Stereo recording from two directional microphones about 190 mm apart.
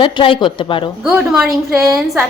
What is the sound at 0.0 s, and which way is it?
Speech, 25° left (ahead or behind).